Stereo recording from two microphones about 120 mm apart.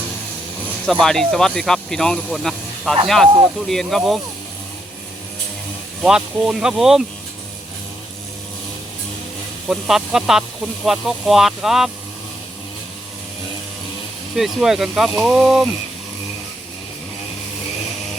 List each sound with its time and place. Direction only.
0.9 s speech: 5° left (ahead or behind)
6.0 s speech: 5° right (ahead or behind)
9.6 s speech: 5° right (ahead or behind)
14.3 s speech: 5° right (ahead or behind)